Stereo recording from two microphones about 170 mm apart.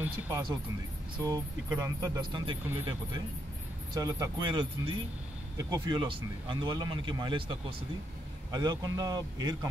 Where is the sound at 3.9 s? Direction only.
25° right (ahead or behind).